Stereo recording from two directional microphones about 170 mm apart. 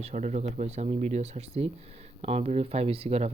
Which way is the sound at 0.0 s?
45° right (ahead or behind).